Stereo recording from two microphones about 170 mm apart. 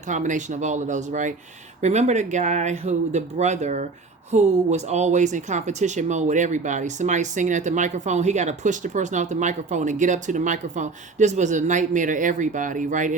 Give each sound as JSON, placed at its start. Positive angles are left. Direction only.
{"t": 0.1, "sound": "speech", "side_deg": -45}